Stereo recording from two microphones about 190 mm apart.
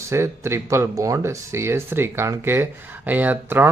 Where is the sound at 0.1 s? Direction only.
15° right (ahead or behind).